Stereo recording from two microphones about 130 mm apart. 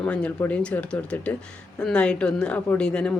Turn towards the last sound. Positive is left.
turn(degrees=10)  # may be behind; listen again after turning